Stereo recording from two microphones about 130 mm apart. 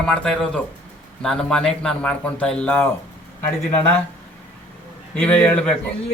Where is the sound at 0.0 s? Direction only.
5° left (ahead or behind).